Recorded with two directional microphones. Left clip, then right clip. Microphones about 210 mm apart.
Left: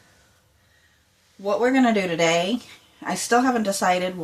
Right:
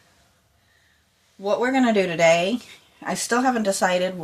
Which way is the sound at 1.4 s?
35° right (ahead or behind).